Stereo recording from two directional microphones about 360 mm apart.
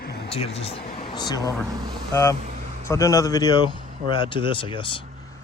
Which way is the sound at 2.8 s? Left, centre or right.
Centre.